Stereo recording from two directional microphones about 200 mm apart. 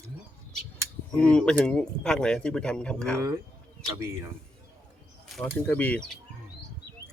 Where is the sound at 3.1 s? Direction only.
15° right (ahead or behind).